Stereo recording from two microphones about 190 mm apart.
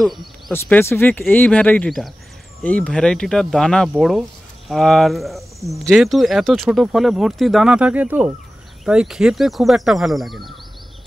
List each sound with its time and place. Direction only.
0.0 s speech: centre (ahead or behind)
0.5 s speech: 10° left (ahead or behind)